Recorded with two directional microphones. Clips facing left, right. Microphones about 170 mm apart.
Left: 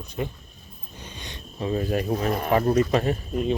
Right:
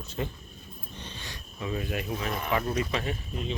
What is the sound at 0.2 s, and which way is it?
Speech, 20° left (ahead or behind).